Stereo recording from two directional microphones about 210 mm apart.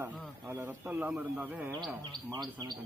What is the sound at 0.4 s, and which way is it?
A man's voice, 10° right (ahead or behind).